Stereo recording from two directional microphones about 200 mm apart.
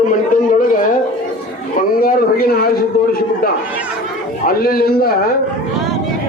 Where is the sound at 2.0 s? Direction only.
50° left (ahead or behind).